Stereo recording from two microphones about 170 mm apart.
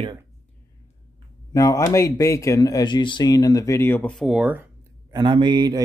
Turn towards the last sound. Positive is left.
turn(degrees=-25)  # may be behind; listen again after turning